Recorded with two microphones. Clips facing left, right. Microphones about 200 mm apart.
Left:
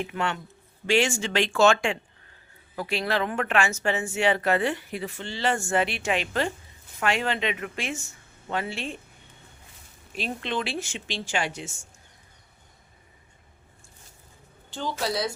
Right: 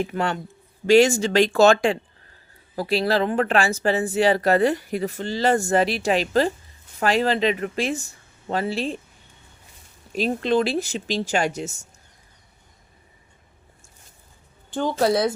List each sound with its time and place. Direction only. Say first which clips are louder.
0.0 s speech: right 5 dB; 40° right (ahead or behind)
10.1 s speech: right 10 dB; 40° right (ahead or behind)
14.7 s a woman's voice: right 9 dB; 50° right (ahead or behind)